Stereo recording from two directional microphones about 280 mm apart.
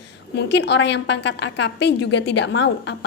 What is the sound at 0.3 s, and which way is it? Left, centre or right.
A woman's voice, left.